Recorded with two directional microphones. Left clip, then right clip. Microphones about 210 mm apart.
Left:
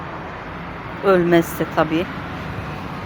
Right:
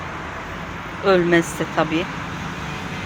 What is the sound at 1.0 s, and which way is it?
Speech, 20° left (ahead or behind).